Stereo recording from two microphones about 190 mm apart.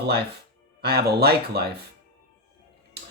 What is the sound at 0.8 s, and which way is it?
Speech, 55° right (ahead or behind).